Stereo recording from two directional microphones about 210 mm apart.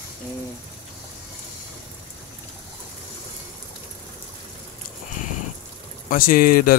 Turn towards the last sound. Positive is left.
turn(degrees=40)  # may be behind; listen again after turning